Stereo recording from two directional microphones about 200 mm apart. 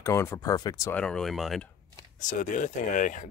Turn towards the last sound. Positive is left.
turn(degrees=40)  # may be behind; listen again after turning